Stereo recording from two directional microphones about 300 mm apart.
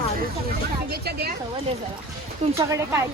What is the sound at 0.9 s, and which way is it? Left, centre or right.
Speech, right.